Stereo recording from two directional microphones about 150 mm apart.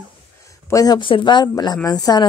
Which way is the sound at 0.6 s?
25° left (ahead or behind).